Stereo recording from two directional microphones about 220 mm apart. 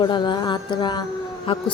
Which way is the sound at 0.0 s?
20° left (ahead or behind).